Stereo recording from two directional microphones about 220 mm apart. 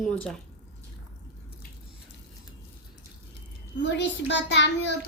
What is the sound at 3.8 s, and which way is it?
Speech, 55° left (ahead or behind).